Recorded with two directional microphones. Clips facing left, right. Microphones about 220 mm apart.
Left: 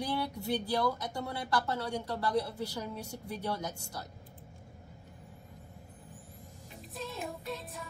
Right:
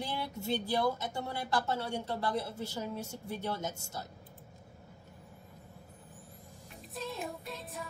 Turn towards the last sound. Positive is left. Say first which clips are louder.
# left 2 dB
turn(degrees=0)  # may be behind; listen again after turning